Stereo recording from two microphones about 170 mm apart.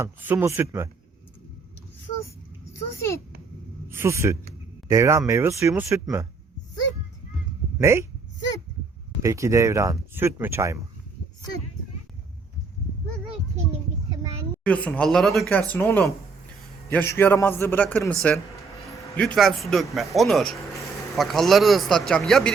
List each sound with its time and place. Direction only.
0.0 s speech: 10° right (ahead or behind)
3.8 s speech: 15° right (ahead or behind)
7.8 s speech: 15° right (ahead or behind)
9.2 s speech: 15° right (ahead or behind)
14.6 s a man's voice: 10° left (ahead or behind)